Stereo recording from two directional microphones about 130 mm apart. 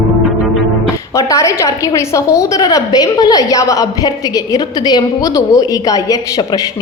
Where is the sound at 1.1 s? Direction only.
25° left (ahead or behind).